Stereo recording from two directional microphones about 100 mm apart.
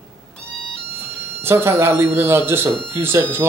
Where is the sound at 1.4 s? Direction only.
25° right (ahead or behind).